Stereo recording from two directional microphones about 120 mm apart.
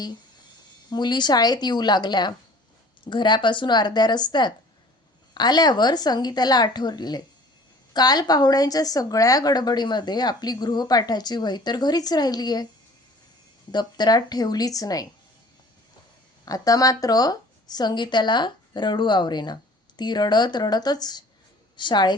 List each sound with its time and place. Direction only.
0.9 s speech: 40° left (ahead or behind)
13.7 s speech: 35° left (ahead or behind)
16.5 s speech: 30° left (ahead or behind)